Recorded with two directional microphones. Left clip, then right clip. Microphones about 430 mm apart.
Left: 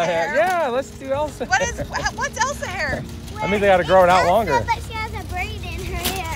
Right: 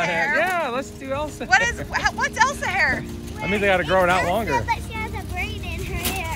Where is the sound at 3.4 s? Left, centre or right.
Left.